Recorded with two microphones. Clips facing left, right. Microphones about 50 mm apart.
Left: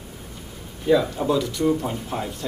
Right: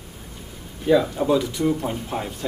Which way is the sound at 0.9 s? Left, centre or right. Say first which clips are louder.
Right 1 dB; centre.